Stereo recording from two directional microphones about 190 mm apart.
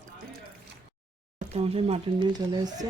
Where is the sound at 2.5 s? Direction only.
20° right (ahead or behind).